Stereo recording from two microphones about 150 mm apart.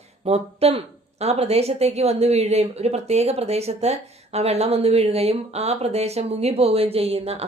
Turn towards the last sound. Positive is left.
turn(degrees=-40)  # may be behind; listen again after turning